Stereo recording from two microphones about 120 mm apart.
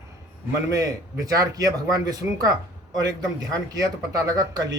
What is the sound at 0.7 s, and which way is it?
Speech, 30° right (ahead or behind).